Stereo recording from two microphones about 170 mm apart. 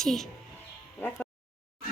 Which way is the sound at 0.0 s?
Centre (ahead or behind).